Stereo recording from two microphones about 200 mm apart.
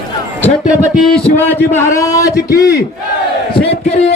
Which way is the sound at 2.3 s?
50° left (ahead or behind).